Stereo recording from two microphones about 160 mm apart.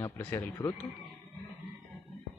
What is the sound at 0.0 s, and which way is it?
Speech, 15° left (ahead or behind).